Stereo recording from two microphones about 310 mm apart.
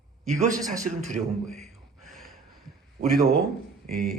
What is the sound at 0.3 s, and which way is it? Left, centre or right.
Speech, right.